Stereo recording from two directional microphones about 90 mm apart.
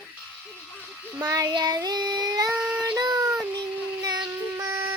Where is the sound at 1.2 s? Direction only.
40° right (ahead or behind).